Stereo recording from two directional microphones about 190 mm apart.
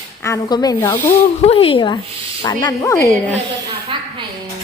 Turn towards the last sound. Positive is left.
turn(degrees=15)  # may be behind; listen again after turning